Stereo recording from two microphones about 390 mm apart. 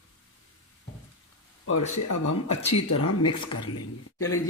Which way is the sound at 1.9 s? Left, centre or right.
Left.